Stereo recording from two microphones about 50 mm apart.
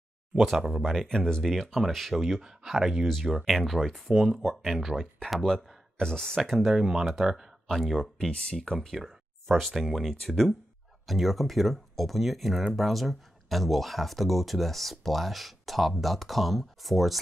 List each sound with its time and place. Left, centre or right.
0.3 s speech: centre
1.0 s speech: centre
3.1 s speech: centre
6.6 s speech: centre
7.6 s speech: centre
8.3 s speech: centre
8.7 s speech: centre